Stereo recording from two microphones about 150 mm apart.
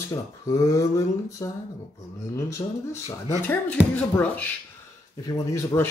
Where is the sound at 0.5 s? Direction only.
20° left (ahead or behind).